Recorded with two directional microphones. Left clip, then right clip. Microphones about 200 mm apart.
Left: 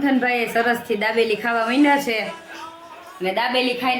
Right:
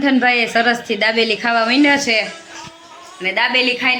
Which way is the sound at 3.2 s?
Centre (ahead or behind).